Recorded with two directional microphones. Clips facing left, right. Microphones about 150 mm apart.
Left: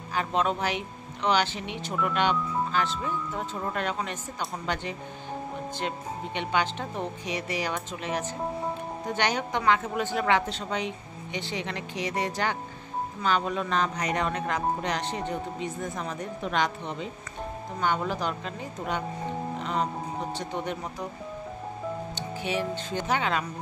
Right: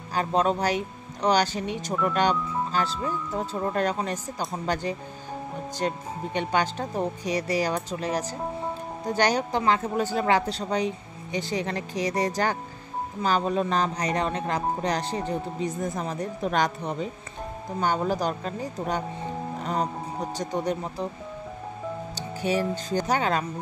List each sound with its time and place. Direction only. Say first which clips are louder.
0.1 s speech: right 3 dB; 35° right (ahead or behind)
19.6 s music: right 2 dB; 40° right (ahead or behind)
20.3 s speech: right 4 dB; 40° right (ahead or behind)
22.1 s speech: right 7 dB; 40° right (ahead or behind)